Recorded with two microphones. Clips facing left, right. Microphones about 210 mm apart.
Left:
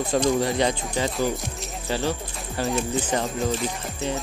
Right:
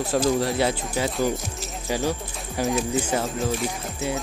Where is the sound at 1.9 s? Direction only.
10° right (ahead or behind).